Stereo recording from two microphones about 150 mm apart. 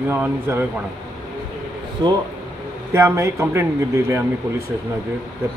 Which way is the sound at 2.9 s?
15° right (ahead or behind).